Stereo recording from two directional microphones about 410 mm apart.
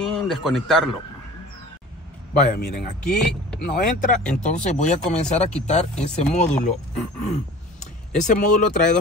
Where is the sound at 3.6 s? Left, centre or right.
Centre.